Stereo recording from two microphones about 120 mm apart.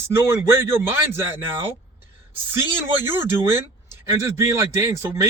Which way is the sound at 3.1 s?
20° right (ahead or behind).